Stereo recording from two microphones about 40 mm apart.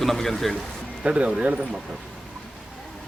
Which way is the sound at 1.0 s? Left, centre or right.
Right.